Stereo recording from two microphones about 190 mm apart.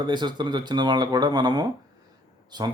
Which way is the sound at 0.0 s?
25° right (ahead or behind).